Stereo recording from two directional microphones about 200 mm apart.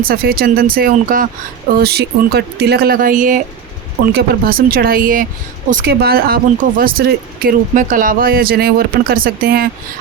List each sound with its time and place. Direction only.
0.0 s speech: 50° right (ahead or behind)